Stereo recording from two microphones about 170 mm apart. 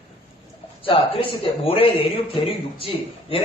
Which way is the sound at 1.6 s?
35° left (ahead or behind).